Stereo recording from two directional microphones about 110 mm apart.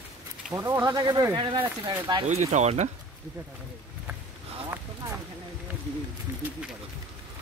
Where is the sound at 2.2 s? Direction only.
90° right.